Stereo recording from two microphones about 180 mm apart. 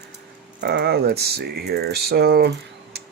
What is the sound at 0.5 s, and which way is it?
Speech, 65° right (ahead or behind).